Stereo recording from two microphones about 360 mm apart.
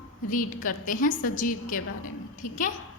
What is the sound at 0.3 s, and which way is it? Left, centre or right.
A woman's voice, left.